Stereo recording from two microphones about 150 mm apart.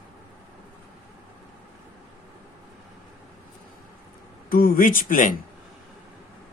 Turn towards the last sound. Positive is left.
turn(degrees=65)  # may be behind; listen again after turning